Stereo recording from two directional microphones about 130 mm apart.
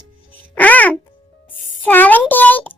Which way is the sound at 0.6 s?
10° left (ahead or behind).